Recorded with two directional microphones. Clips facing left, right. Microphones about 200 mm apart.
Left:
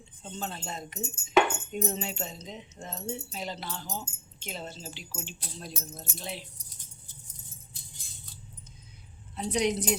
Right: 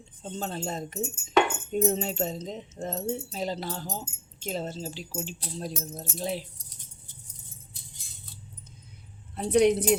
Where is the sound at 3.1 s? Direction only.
45° right (ahead or behind).